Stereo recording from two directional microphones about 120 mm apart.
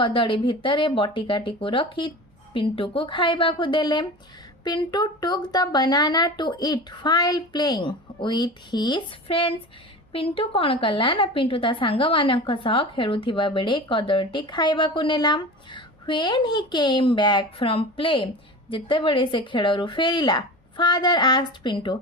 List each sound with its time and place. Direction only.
0.0 s a woman's voice: 45° left (ahead or behind)